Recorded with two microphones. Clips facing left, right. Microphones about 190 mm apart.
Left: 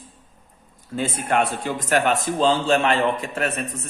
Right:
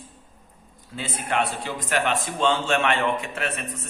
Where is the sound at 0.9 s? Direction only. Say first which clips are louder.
Left 5 dB; 50° left (ahead or behind).